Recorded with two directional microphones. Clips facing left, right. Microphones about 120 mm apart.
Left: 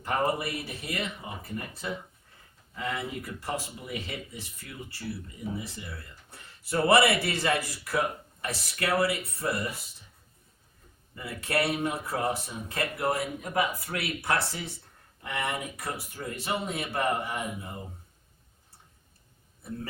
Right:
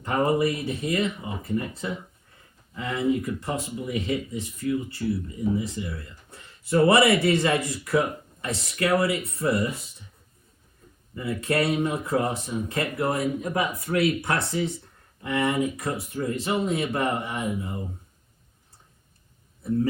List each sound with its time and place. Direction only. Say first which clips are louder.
0.1 s speech: right 6 dB; 25° right (ahead or behind)
11.1 s speech: right 5 dB; 25° right (ahead or behind)